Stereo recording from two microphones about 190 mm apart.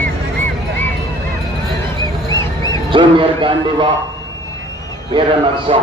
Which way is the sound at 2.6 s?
25° right (ahead or behind).